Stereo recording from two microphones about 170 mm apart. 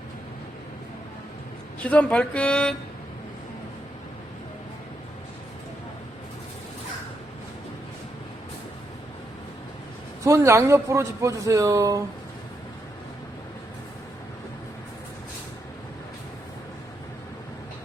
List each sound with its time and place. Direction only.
1.8 s speech: 10° left (ahead or behind)
10.2 s a man's voice: 15° right (ahead or behind)